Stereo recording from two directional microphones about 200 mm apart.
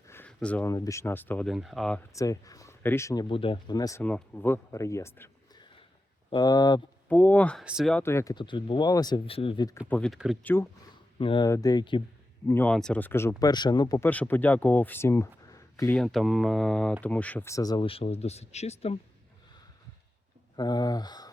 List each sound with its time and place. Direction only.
0.1 s speech: 10° left (ahead or behind)
2.1 s speech: 15° left (ahead or behind)
7.1 s speech: 10° left (ahead or behind)
8.0 s speech: 15° left (ahead or behind)
9.9 s speech: centre (ahead or behind)
11.2 s speech: 25° left (ahead or behind)
12.5 s speech: 10° left (ahead or behind)
16.0 s speech: centre (ahead or behind); by 18.9 s 30° left (ahead or behind)
20.6 s speech: 20° left (ahead or behind)